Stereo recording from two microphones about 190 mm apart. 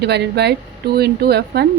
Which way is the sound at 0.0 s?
60° right (ahead or behind).